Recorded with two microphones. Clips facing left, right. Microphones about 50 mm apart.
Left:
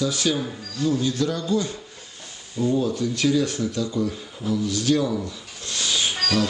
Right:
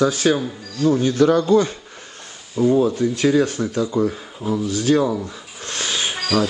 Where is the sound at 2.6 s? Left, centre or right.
Right.